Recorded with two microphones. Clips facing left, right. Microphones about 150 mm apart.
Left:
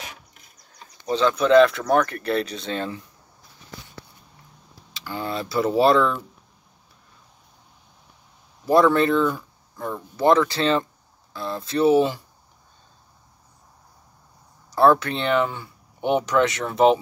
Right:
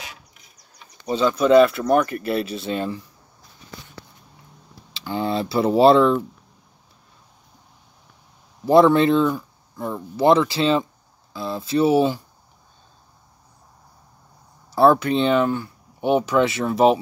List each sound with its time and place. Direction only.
1.0 s speech: 5° right (ahead or behind)
4.9 s speech: 25° right (ahead or behind)
8.6 s speech: 25° right (ahead or behind)
9.8 s speech: 5° right (ahead or behind)
10.2 s speech: 20° right (ahead or behind)
10.5 s speech: 10° right (ahead or behind)
14.7 s speech: 10° right (ahead or behind)
15.4 s speech: 5° right (ahead or behind)